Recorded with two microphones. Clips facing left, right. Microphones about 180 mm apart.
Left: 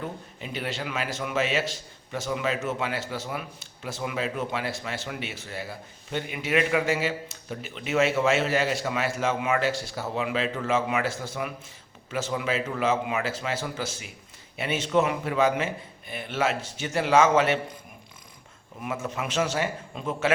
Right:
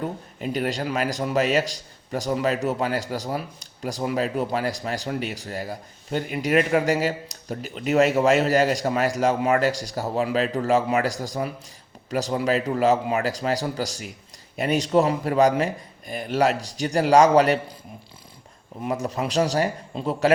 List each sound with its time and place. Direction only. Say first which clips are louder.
0.3 s a man's voice: right 8 dB; 45° right (ahead or behind)
18.8 s a man's voice: right 5 dB; 35° right (ahead or behind)